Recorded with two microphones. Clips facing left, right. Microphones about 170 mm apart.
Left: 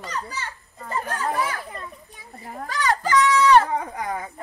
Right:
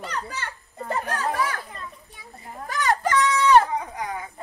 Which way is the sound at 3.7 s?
50° left (ahead or behind).